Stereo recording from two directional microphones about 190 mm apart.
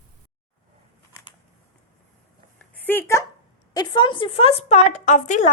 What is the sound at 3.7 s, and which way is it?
A woman's voice, 25° left (ahead or behind).